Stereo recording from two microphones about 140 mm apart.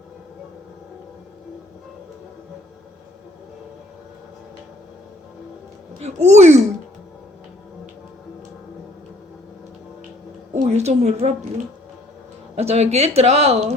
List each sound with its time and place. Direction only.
6.0 s speech: 50° right (ahead or behind)
10.5 s a woman's voice: 55° right (ahead or behind)